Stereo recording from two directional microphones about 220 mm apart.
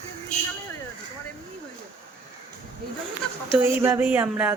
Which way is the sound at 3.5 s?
10° right (ahead or behind).